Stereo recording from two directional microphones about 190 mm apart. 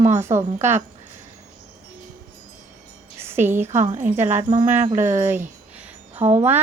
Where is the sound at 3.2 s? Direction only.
10° right (ahead or behind).